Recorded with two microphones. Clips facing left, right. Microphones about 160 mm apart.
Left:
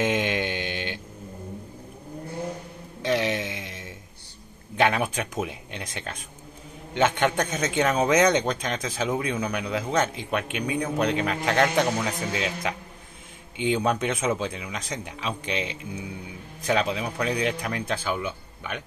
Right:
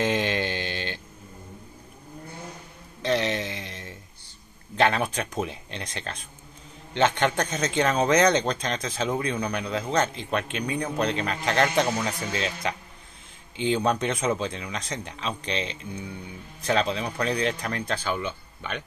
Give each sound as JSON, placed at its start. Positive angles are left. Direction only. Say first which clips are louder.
{"t": 0.0, "sound": "mantra", "louder": "even", "side_deg": 10}
{"t": 3.1, "sound": "a sound", "louder": "even", "side_deg": 10}
{"t": 4.7, "sound": "a man's voice", "louder": "even", "side_deg": 10}